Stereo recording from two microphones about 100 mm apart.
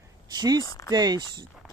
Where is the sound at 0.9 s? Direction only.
45° right (ahead or behind).